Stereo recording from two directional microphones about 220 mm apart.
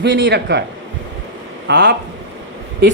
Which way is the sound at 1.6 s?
50° right (ahead or behind).